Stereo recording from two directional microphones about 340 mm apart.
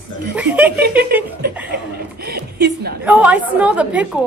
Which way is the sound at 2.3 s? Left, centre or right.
Right.